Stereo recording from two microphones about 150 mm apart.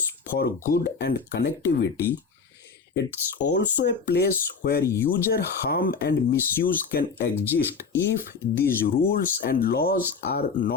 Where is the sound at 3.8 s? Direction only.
90° left.